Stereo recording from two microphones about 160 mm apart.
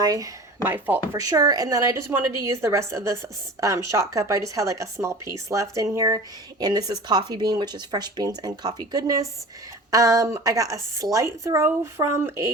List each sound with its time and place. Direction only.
0.0 s a woman's voice: 20° right (ahead or behind)